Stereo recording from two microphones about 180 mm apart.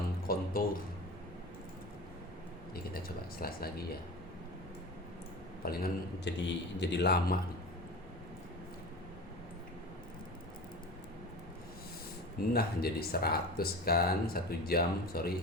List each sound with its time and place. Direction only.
0.2 s a sound: 55° left (ahead or behind)
3.4 s speech: 60° left (ahead or behind)
5.6 s a man's voice: 55° left (ahead or behind)
12.5 s speech: 60° left (ahead or behind)